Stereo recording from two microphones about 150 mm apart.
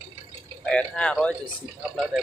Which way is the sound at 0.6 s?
5° left (ahead or behind).